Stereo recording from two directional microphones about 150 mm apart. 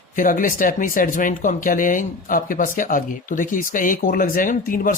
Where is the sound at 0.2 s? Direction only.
65° left (ahead or behind).